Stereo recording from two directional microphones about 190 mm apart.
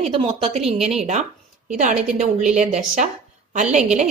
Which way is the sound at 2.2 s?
40° right (ahead or behind).